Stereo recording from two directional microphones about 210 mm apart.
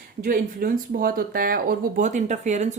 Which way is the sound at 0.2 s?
40° right (ahead or behind).